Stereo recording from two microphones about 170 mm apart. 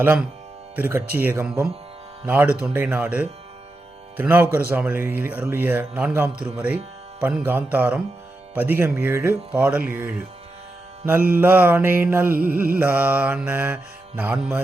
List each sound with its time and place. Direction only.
0.0 s a man's voice: 10° right (ahead or behind)